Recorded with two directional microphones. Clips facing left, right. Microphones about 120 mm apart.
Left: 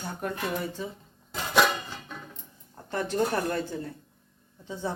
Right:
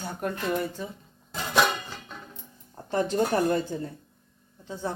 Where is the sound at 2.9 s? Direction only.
15° right (ahead or behind).